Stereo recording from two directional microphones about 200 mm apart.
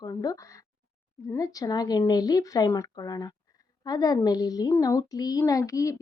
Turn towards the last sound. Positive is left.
turn(degrees=15)  # may be behind; listen again after turning